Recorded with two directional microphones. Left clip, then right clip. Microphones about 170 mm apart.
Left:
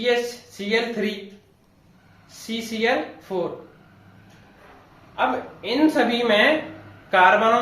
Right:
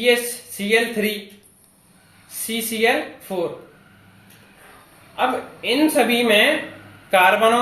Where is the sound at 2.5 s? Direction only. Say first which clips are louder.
Right 3 dB; 55° right (ahead or behind).